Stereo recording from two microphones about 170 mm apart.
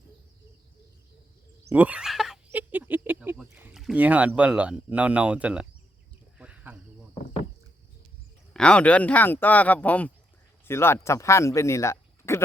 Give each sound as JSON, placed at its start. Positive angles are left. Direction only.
{"t": 1.7, "sound": "a sound", "side_deg": -10}
{"t": 3.8, "sound": "speech", "side_deg": -5}
{"t": 6.4, "sound": "cricket", "side_deg": -10}
{"t": 8.5, "sound": "speech", "side_deg": 5}